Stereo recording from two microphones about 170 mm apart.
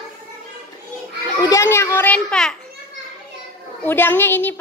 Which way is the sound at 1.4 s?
15° left (ahead or behind).